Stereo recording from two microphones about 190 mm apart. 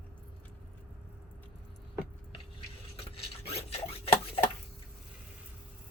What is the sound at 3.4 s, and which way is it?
Rub, 30° left (ahead or behind).